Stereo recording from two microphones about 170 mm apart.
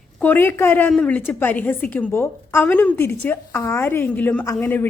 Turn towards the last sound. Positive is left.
turn(degrees=10)  # may be behind; listen again after turning